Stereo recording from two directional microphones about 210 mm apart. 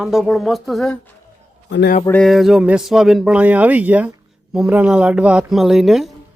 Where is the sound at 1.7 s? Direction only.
50° left (ahead or behind).